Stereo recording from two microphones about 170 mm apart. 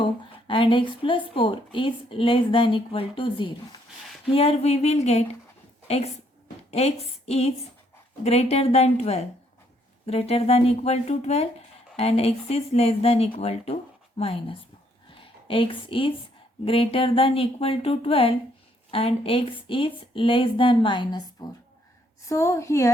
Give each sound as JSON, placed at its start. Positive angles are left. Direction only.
{"t": 0.0, "sound": "a woman's voice", "side_deg": 30}